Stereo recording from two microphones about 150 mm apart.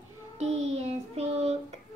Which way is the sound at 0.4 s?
45° right (ahead or behind).